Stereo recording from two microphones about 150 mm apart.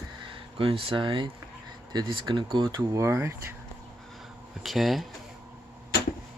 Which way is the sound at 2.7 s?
20° right (ahead or behind).